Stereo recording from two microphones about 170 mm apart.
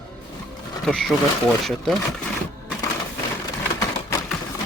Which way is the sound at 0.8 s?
Centre (ahead or behind).